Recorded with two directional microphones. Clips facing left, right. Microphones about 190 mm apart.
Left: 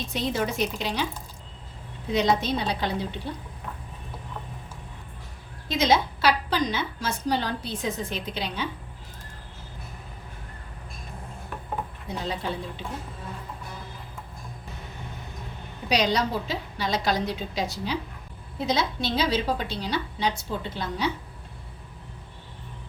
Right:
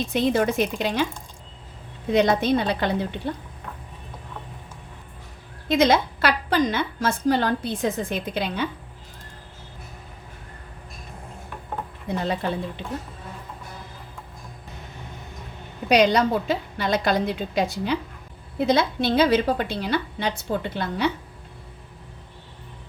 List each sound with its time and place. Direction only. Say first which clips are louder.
0.1 s speech: right 6 dB; 55° right (ahead or behind)
2.1 s a woman's voice: right 4 dB; 55° right (ahead or behind)
5.6 s a woman's voice: right 4 dB; 55° right (ahead or behind)
12.0 s a woman's voice: right 8 dB; 60° right (ahead or behind)
15.9 s a woman's voice: right 6 dB; 55° right (ahead or behind)